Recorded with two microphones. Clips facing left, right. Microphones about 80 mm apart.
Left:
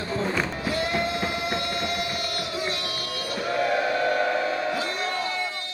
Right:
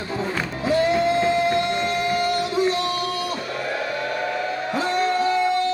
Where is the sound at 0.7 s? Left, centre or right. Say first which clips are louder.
Right 11 dB; right.